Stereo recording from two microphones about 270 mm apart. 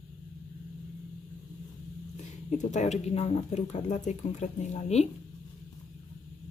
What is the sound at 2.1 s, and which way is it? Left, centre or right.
Speech, left.